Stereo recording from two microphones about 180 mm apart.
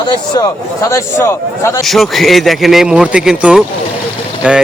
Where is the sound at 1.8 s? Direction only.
Centre (ahead or behind).